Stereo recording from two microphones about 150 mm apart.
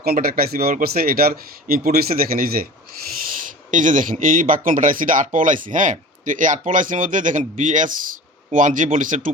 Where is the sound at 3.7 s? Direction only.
60° right (ahead or behind).